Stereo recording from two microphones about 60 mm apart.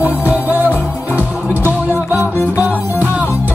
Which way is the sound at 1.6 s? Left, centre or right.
Right.